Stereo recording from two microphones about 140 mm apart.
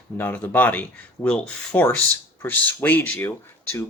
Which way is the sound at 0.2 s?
15° left (ahead or behind).